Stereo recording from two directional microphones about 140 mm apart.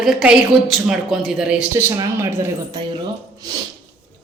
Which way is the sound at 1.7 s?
15° right (ahead or behind).